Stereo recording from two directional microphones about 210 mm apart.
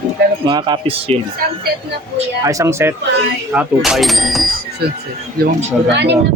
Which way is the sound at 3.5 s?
Centre (ahead or behind).